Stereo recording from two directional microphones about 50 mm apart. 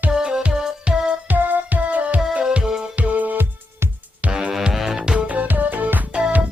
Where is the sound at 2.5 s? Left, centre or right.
Centre.